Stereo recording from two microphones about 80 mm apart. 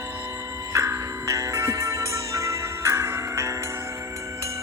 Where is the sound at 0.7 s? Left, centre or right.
Right.